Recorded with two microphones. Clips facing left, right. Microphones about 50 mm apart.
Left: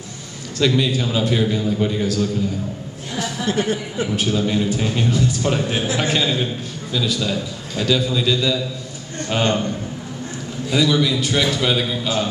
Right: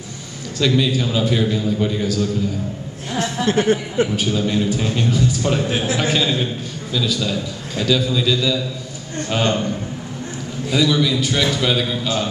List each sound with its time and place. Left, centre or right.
0.6 s a man's voice: centre
3.2 s speech: right
4.1 s a man's voice: centre
10.7 s a man's voice: centre